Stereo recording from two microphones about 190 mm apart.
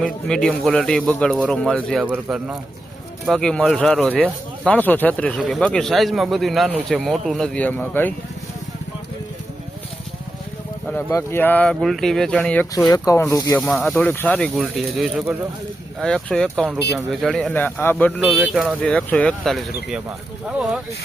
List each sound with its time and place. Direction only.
0.0 s speech: 5° left (ahead or behind)
3.2 s speech: 5° left (ahead or behind)
10.8 s speech: 10° left (ahead or behind)
12.9 s a man's voice: 15° left (ahead or behind)
13.6 s a man's voice: 5° left (ahead or behind)
18.2 s speech: 5° right (ahead or behind)